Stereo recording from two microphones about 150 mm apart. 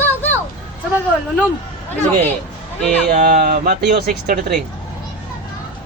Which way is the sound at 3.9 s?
90° right.